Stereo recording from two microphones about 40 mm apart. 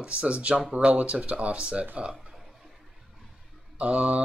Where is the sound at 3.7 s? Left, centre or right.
Right.